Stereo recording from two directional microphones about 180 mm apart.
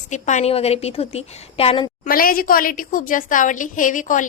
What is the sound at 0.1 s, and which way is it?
A woman's voice, 40° left (ahead or behind).